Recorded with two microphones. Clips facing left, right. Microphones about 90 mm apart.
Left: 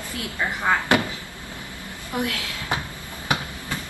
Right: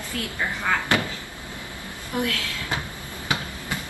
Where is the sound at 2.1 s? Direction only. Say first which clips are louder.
Even; 20° left (ahead or behind).